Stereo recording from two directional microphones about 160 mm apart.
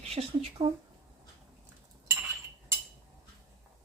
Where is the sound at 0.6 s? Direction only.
30° right (ahead or behind).